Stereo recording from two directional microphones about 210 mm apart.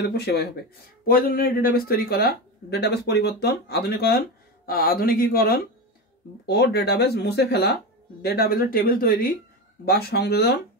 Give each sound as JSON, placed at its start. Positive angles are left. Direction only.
{"t": 0.0, "sound": "speech", "side_deg": 50}